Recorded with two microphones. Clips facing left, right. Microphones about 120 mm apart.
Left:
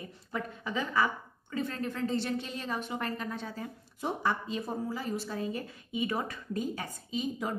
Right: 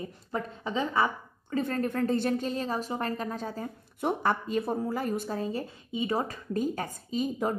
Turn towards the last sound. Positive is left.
turn(degrees=-45)  # may be behind; listen again after turning